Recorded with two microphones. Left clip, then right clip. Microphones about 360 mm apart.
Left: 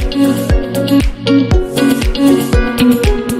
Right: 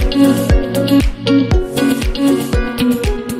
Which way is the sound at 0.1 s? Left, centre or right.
Centre.